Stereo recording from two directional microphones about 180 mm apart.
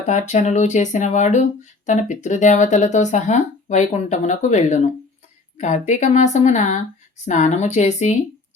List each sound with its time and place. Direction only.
0.0 s speech: 40° left (ahead or behind)